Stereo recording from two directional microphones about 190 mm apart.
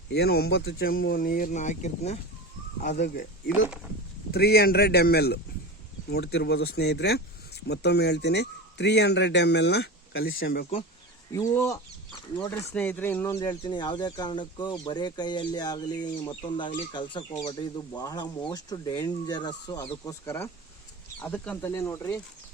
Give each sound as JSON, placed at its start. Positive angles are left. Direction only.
{"t": 0.1, "sound": "a man's voice", "side_deg": 60}
{"t": 3.0, "sound": "speech", "side_deg": 60}
{"t": 10.4, "sound": "speech", "side_deg": 55}
{"t": 11.3, "sound": "speech", "side_deg": 15}